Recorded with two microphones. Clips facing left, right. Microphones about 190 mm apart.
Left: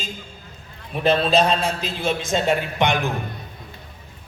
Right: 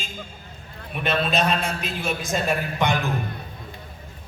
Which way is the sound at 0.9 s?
30° left (ahead or behind).